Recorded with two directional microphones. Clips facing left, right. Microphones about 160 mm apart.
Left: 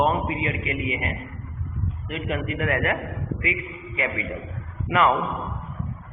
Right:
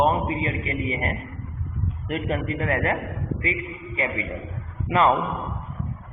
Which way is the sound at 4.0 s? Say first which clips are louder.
Even; 25° right (ahead or behind).